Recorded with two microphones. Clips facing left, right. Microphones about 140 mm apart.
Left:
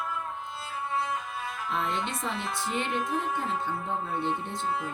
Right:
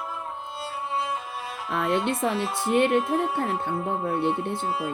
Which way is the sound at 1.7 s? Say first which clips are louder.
Right 7 dB; 60° right (ahead or behind).